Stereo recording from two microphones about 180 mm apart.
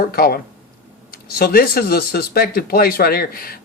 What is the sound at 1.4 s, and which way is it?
Speech, 55° left (ahead or behind).